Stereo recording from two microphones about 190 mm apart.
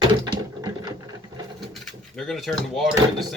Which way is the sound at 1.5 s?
Centre (ahead or behind).